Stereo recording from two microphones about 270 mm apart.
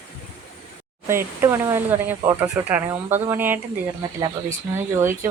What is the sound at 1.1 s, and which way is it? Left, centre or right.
Speech, centre.